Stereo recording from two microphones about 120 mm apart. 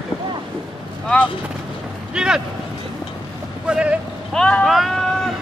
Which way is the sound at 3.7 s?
10° right (ahead or behind).